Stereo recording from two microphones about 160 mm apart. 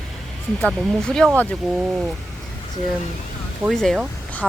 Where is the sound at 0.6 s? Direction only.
5° left (ahead or behind).